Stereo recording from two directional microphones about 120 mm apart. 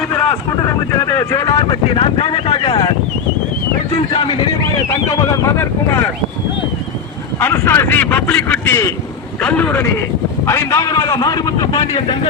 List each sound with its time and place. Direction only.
0.1 s boat: 25° left (ahead or behind)
2.0 s a sound: 50° left (ahead or behind)
3.9 s a sound: 45° left (ahead or behind)
5.0 s speech: 25° left (ahead or behind)
7.3 s a man's voice: 20° left (ahead or behind)
10.4 s a man's voice: 25° left (ahead or behind); by 12.3 s 45° left (ahead or behind)